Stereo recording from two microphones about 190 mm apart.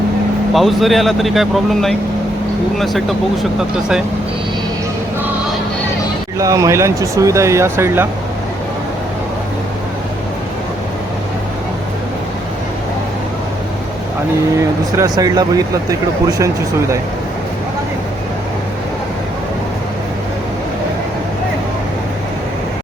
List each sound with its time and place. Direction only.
0.5 s speech: centre (ahead or behind)
6.4 s speech: 15° right (ahead or behind)
14.9 s speech: 20° right (ahead or behind)